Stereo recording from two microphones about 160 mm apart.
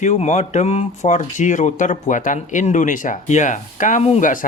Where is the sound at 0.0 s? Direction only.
45° left (ahead or behind).